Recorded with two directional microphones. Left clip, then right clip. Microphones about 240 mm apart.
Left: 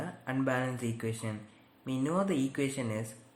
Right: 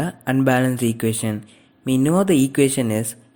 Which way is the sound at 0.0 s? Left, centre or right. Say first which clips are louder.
Right 14 dB; right.